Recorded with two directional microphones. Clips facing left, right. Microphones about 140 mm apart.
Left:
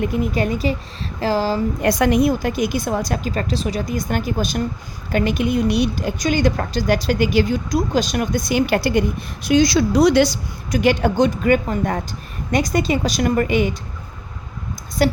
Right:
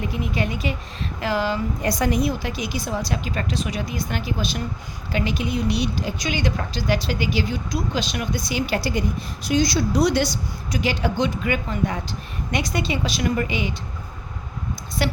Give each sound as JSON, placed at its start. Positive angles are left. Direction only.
{"t": 0.0, "sound": "a woman's voice", "side_deg": 50}
{"t": 1.8, "sound": "a woman's voice", "side_deg": 65}
{"t": 2.3, "sound": "a woman's voice", "side_deg": 45}
{"t": 10.7, "sound": "a woman's voice", "side_deg": 50}
{"t": 15.0, "sound": "speech", "side_deg": 40}